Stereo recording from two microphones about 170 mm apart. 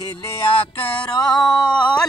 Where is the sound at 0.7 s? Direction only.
30° left (ahead or behind).